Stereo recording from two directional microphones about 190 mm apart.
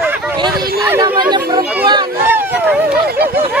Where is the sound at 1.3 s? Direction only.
20° right (ahead or behind).